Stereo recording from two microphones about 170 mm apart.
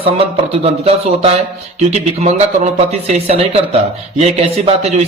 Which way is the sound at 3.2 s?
35° right (ahead or behind).